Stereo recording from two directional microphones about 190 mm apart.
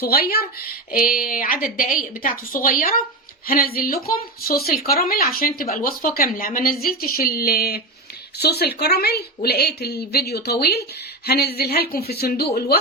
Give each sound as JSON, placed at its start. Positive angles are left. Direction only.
{"t": 0.0, "sound": "a woman's voice", "side_deg": 55}